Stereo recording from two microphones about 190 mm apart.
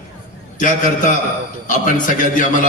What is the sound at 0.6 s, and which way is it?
A man's voice, 45° left (ahead or behind).